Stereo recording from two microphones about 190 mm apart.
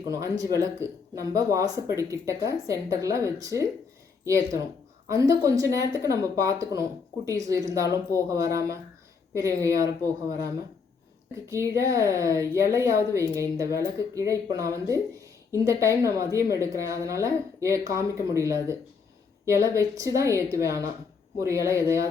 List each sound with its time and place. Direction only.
0.0 s speech: 20° right (ahead or behind)
11.4 s speech: 15° right (ahead or behind)